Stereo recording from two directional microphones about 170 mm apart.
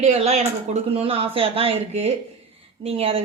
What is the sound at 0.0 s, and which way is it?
Speech, 40° right (ahead or behind).